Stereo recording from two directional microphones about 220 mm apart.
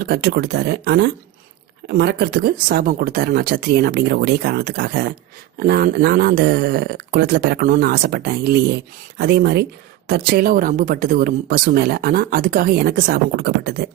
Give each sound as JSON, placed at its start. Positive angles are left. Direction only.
{"t": 0.0, "sound": "speech", "side_deg": -45}